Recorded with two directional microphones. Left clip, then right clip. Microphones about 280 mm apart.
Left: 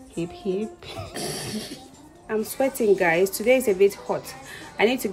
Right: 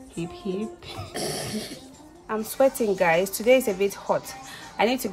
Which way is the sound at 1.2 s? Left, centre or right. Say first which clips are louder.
Right 2 dB; centre.